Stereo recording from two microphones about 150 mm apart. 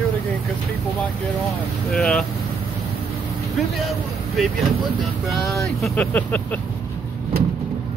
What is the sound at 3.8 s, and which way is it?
Speech, centre (ahead or behind).